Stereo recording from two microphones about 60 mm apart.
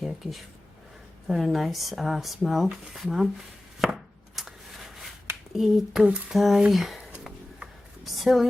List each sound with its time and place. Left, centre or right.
0.0 s speech: centre
3.8 s chopping: centre
5.5 s speech: centre
8.0 s speech: centre